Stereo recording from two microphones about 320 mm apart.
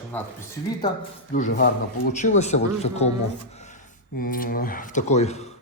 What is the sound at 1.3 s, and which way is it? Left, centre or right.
Speech, left.